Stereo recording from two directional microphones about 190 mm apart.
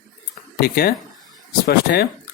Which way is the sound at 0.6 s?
55° left (ahead or behind).